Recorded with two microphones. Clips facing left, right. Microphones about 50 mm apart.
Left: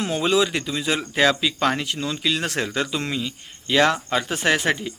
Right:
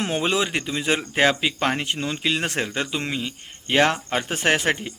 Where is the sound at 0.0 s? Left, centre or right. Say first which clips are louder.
Left 2 dB; right.